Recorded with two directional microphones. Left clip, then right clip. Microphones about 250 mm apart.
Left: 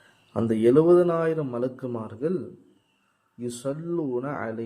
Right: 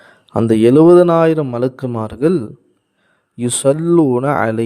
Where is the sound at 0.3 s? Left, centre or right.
Right.